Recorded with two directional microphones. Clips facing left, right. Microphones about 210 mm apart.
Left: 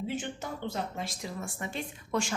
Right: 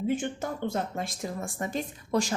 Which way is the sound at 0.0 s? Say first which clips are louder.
Right 6 dB; 50° right (ahead or behind).